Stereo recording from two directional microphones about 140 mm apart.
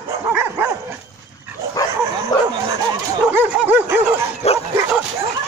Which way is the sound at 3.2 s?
10° right (ahead or behind).